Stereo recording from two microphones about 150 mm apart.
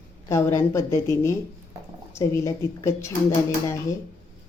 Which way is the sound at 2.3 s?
20° left (ahead or behind).